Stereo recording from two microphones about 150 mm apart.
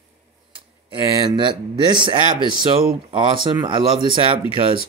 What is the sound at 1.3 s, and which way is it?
A man's voice, 30° right (ahead or behind).